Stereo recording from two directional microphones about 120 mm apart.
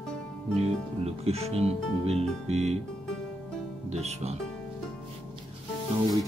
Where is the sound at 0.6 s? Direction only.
60° right (ahead or behind).